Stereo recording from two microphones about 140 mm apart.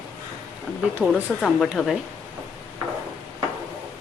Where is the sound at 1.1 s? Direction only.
5° left (ahead or behind).